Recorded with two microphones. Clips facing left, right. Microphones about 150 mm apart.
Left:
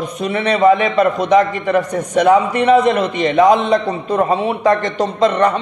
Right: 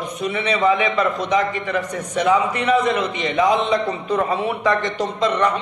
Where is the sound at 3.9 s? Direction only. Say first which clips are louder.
Left 5 dB; 35° left (ahead or behind).